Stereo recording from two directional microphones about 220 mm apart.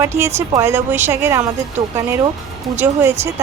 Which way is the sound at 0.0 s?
10° right (ahead or behind).